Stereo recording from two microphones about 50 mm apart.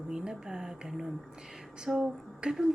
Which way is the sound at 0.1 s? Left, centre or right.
Centre.